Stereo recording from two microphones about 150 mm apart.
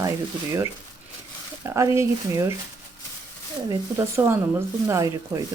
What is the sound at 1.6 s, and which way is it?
Speech, 20° right (ahead or behind).